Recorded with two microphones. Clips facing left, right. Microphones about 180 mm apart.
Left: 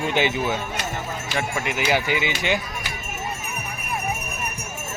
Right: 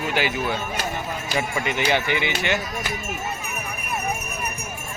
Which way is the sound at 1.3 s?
5° left (ahead or behind).